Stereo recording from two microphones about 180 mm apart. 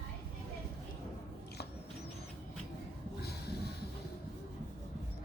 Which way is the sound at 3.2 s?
60° left (ahead or behind).